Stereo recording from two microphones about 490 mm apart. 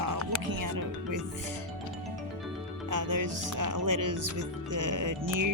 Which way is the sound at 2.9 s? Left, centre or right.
Right.